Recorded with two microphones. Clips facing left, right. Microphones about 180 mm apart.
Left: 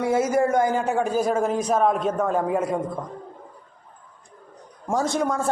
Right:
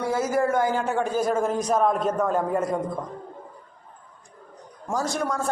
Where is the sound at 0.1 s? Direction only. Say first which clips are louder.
Left 2 dB; 20° left (ahead or behind).